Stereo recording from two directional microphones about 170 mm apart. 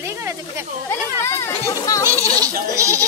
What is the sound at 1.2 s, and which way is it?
Speech, 15° left (ahead or behind).